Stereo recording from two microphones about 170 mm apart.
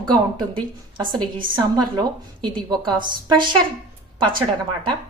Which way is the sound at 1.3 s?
25° right (ahead or behind).